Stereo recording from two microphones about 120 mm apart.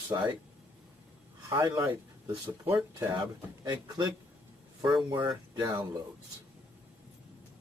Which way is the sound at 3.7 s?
40° right (ahead or behind).